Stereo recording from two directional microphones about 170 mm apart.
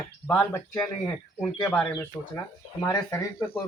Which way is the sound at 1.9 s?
15° left (ahead or behind).